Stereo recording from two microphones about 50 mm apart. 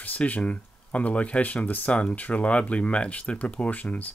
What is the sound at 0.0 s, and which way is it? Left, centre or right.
Speech, left.